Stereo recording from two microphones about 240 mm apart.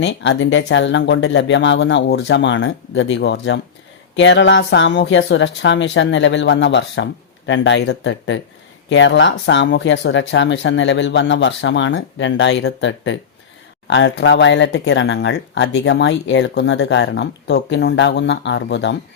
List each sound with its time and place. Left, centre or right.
0.0 s speech: left